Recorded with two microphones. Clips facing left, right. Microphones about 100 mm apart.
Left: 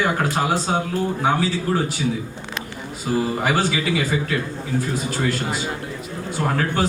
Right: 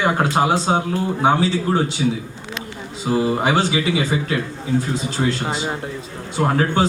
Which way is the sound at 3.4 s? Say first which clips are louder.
Right 2 dB; 25° right (ahead or behind).